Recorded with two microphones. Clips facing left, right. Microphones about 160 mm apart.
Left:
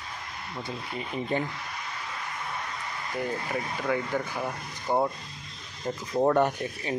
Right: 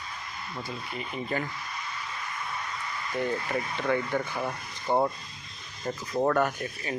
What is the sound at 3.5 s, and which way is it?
Speech, 5° left (ahead or behind).